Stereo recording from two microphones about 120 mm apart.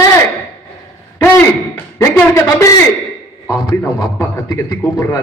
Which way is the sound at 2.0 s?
25° left (ahead or behind).